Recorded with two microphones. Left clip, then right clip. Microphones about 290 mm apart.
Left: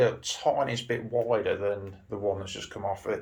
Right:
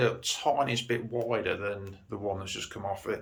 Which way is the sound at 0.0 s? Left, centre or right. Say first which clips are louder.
Left 3 dB; centre.